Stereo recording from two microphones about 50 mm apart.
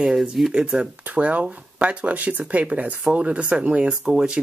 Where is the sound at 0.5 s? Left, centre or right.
Centre.